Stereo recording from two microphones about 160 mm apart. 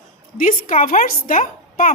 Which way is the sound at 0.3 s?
55° left (ahead or behind).